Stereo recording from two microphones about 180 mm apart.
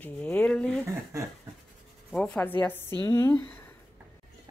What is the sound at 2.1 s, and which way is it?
Speech, 5° left (ahead or behind).